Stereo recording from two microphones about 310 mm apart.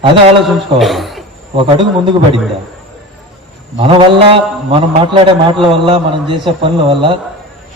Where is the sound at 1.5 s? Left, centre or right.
Centre.